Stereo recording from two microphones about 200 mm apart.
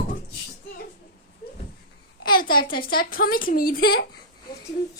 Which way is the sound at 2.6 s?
45° left (ahead or behind).